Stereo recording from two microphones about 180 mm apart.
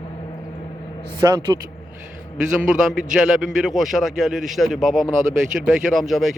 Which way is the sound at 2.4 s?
5° right (ahead or behind).